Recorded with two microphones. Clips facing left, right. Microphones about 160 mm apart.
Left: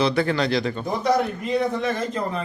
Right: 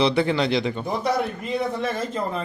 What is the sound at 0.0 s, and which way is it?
Speech, 20° right (ahead or behind).